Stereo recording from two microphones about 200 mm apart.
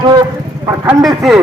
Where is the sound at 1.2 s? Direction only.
Centre (ahead or behind).